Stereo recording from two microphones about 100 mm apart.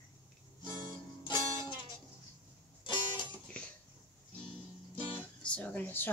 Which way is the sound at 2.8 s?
50° left (ahead or behind).